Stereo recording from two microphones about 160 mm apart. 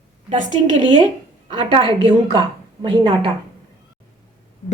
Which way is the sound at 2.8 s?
30° right (ahead or behind).